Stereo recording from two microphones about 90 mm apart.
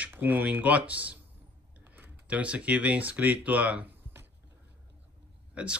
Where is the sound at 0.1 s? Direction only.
20° right (ahead or behind).